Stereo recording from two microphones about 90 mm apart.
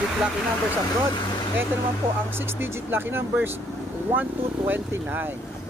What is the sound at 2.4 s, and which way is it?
Speech, 25° right (ahead or behind).